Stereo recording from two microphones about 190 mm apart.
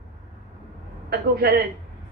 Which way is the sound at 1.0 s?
55° right (ahead or behind).